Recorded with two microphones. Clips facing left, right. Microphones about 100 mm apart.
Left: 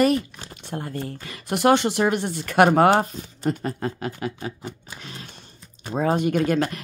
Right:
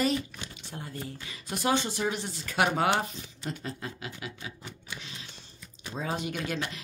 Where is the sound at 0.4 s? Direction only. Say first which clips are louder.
Left 9 dB; 50° left (ahead or behind).